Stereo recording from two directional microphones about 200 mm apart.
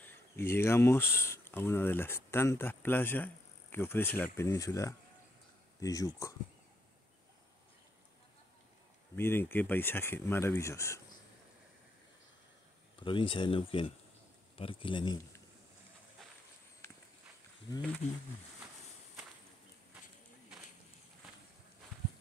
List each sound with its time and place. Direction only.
0.0 s speech: 10° left (ahead or behind)
9.1 s speech: 10° left (ahead or behind)
13.0 s speech: 25° left (ahead or behind)